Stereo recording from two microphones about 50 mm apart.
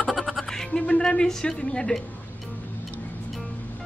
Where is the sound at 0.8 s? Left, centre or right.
Centre.